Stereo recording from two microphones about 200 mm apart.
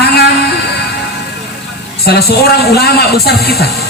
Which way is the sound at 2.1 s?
50° left (ahead or behind).